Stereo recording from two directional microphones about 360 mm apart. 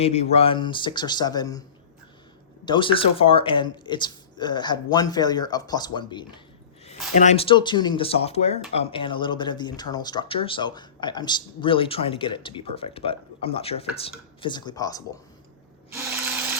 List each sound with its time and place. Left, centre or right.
0.0 s speech: centre
2.6 s speech: centre
15.9 s electric toothbrush: centre